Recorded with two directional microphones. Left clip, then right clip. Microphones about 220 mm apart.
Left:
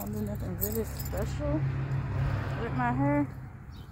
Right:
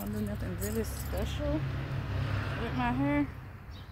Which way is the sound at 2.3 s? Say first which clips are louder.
Even; 10° left (ahead or behind).